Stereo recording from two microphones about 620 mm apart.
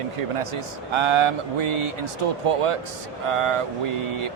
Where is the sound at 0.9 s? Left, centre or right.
Right.